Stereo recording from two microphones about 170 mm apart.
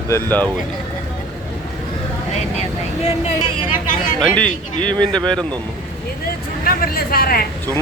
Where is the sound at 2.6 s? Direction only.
40° left (ahead or behind).